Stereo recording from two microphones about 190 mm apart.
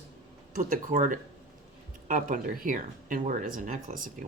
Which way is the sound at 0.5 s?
45° right (ahead or behind).